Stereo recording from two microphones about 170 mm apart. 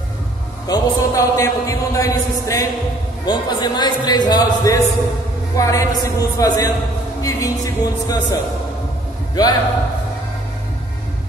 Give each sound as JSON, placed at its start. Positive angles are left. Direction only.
{"t": 0.7, "sound": "a man's voice", "side_deg": 20}